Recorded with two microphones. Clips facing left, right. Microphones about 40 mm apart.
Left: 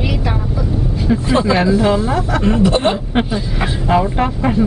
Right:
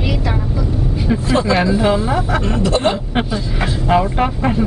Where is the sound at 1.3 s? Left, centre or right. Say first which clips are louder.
Left 1 dB; centre.